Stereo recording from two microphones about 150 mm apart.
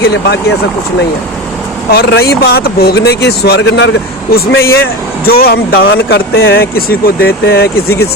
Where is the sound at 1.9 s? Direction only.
90° left.